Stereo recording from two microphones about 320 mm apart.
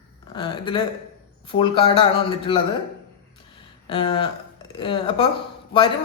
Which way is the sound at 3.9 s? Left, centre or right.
Centre.